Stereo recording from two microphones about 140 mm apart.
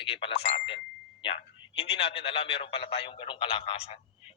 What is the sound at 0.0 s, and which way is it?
A man's voice, 40° left (ahead or behind).